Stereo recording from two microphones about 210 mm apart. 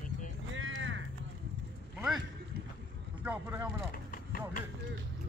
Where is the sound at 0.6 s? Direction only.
65° right (ahead or behind).